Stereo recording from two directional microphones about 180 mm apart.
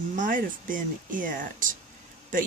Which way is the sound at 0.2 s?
50° right (ahead or behind).